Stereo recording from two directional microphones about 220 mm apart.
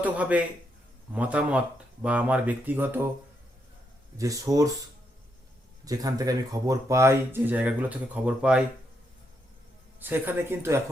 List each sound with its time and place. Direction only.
0.0 s speech: 5° right (ahead or behind)
4.2 s speech: 15° right (ahead or behind)
5.8 s speech: 15° right (ahead or behind)
10.0 s speech: 10° right (ahead or behind)